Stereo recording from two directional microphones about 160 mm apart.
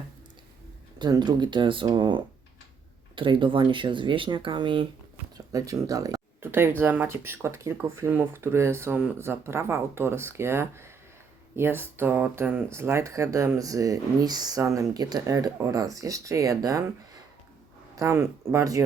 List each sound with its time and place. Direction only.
0.9 s speech: 25° right (ahead or behind)
5.5 s speech: 20° right (ahead or behind)
17.9 s speech: 20° right (ahead or behind)